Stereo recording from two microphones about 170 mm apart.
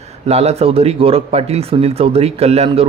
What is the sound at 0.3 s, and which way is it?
Speech, 40° right (ahead or behind).